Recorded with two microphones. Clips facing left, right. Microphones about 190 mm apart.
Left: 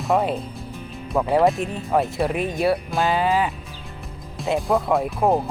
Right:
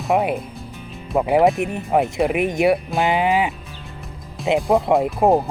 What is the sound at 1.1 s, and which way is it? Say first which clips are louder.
Speech: right 2 dB; 15° right (ahead or behind).